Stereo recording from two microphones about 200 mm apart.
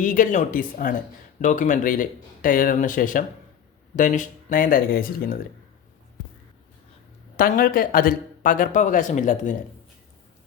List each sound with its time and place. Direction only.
0.0 s speech: 40° left (ahead or behind)
7.3 s speech: 45° left (ahead or behind)